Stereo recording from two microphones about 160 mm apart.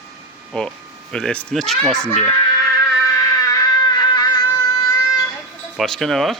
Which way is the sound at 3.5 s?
25° left (ahead or behind).